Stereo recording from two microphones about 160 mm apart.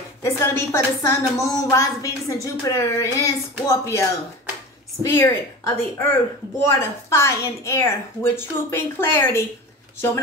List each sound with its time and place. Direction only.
0.2 s a woman's voice: 15° left (ahead or behind)